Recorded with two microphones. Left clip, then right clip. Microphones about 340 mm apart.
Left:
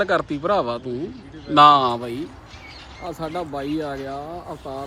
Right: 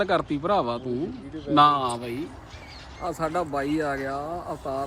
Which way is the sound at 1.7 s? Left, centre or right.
Left.